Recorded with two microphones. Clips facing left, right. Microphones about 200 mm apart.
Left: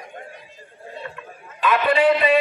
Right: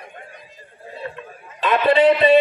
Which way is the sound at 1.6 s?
25° right (ahead or behind).